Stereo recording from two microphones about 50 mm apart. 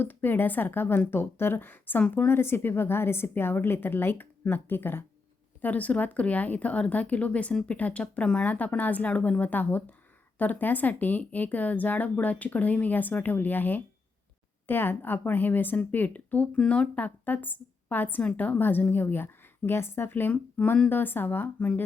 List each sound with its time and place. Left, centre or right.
0.0 s a woman's voice: left
5.6 s speech: left
8.4 s a woman's voice: left
20.6 s speech: left
20.9 s a woman's voice: left